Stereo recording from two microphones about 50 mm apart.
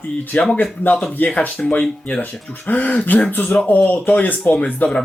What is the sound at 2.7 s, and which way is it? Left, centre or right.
Speech, left.